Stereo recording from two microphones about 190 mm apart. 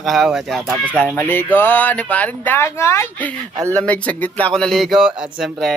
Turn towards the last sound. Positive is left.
turn(degrees=0)  # may be behind; listen again after turning